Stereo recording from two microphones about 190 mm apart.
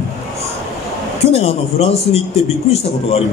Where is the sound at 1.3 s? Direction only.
35° left (ahead or behind).